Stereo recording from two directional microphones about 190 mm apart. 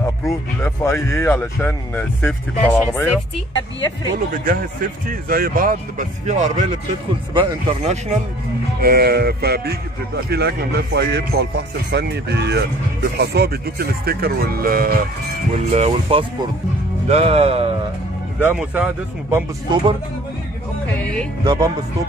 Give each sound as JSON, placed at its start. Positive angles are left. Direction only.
{"t": 0.0, "sound": "speech", "side_deg": 15}
{"t": 4.3, "sound": "speech", "side_deg": -45}
{"t": 8.8, "sound": "speech", "side_deg": -55}
{"t": 15.5, "sound": "speech", "side_deg": -35}
{"t": 18.4, "sound": "speech", "side_deg": -10}
{"t": 19.3, "sound": "speech", "side_deg": -25}
{"t": 20.8, "sound": "speech", "side_deg": 5}
{"t": 21.5, "sound": "speech", "side_deg": -20}